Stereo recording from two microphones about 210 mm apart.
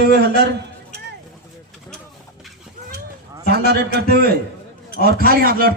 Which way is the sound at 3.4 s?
50° right (ahead or behind).